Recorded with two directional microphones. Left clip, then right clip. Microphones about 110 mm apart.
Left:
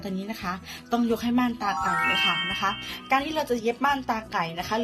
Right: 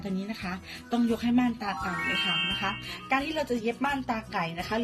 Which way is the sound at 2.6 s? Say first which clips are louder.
Left 4 dB; 20° right (ahead or behind).